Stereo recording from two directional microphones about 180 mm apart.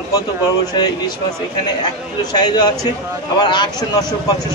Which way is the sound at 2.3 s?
20° left (ahead or behind).